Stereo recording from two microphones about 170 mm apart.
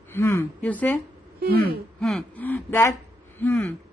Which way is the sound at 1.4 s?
70° right (ahead or behind).